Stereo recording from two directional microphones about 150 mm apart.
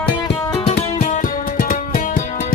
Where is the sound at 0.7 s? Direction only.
45° left (ahead or behind).